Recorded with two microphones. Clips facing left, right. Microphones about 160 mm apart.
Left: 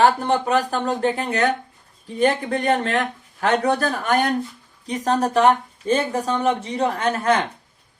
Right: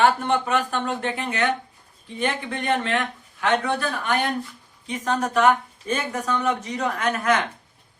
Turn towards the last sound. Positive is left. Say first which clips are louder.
# left 2 dB
turn(degrees=30)  # may be behind; listen again after turning